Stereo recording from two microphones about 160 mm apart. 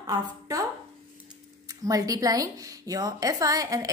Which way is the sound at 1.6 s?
20° right (ahead or behind).